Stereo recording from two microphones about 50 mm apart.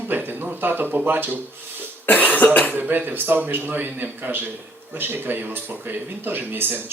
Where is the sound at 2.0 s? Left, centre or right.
Left.